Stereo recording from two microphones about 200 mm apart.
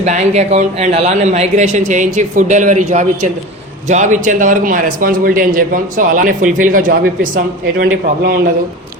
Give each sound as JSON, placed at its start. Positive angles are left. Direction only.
{"t": 0.0, "sound": "a man's voice", "side_deg": -35}